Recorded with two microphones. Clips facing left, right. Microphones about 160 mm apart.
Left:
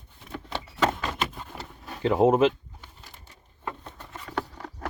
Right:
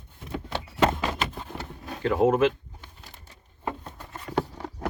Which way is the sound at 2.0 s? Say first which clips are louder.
Left 1 dB; 20° left (ahead or behind).